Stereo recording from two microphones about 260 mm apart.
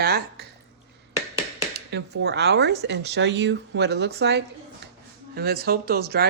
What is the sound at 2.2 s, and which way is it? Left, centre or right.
Speech, right.